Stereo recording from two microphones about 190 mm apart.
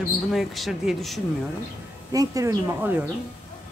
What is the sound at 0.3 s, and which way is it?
Speech, centre (ahead or behind).